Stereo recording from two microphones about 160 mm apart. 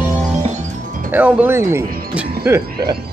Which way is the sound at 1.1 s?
10° right (ahead or behind).